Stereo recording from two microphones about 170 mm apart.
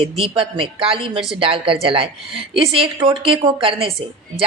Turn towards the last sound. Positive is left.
turn(degrees=-35)  # may be behind; listen again after turning